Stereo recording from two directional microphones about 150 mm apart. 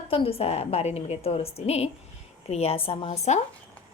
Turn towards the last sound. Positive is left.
turn(degrees=35)  # may be behind; listen again after turning